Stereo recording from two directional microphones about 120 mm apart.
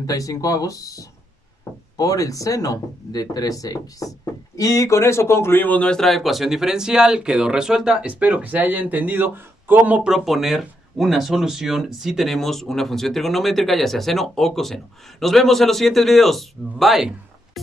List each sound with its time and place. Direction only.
0.0 s speech: 30° left (ahead or behind); by 17.1 s centre (ahead or behind)